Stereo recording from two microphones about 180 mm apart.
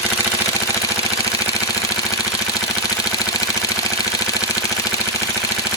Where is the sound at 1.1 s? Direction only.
20° left (ahead or behind).